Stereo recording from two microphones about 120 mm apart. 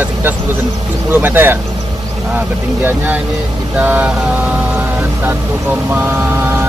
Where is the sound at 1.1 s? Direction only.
20° right (ahead or behind).